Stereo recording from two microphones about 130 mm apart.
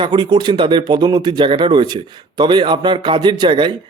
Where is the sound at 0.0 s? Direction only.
35° right (ahead or behind).